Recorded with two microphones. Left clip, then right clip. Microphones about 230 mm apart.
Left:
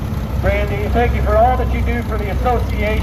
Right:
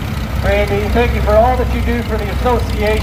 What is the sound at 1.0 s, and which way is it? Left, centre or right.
Speech, right.